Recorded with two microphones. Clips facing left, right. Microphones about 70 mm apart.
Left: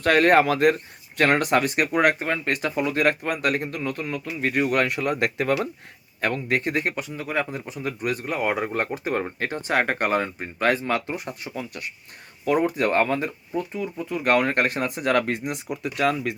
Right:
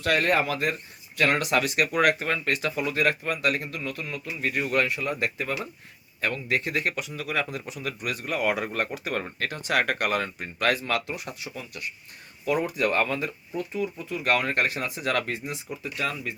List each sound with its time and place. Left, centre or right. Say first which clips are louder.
0.0 s speech: left 6 dB; left
6.2 s speech: left 3 dB; left